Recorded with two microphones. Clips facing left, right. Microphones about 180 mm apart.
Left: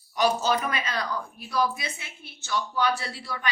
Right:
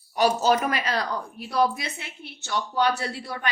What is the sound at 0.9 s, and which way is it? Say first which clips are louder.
A woman's voice: right 3 dB; 60° right (ahead or behind).